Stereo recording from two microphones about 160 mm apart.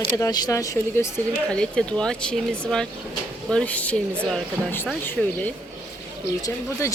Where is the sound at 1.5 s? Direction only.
5° left (ahead or behind).